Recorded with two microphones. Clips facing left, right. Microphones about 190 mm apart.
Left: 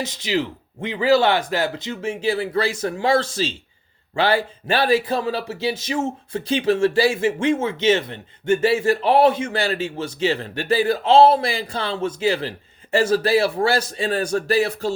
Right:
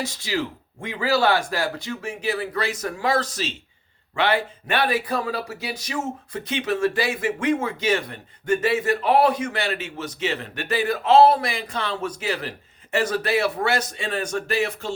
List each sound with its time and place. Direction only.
0.0 s a man's voice: 20° left (ahead or behind); by 14.9 s 35° left (ahead or behind)